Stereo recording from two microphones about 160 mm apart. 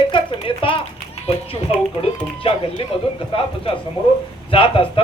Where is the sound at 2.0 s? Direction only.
35° left (ahead or behind).